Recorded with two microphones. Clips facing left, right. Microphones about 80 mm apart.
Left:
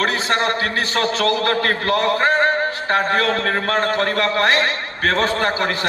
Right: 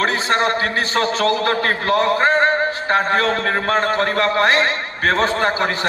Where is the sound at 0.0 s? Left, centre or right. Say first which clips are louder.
Right 1 dB; right.